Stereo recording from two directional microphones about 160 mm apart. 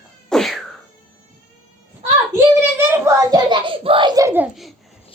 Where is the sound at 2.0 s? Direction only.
15° right (ahead or behind).